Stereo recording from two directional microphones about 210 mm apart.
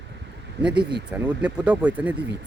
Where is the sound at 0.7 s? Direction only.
20° right (ahead or behind).